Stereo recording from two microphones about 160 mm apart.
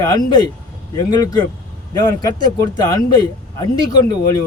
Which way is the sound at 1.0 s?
20° left (ahead or behind).